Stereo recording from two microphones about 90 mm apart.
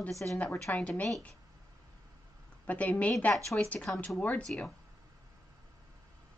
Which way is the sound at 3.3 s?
Centre (ahead or behind).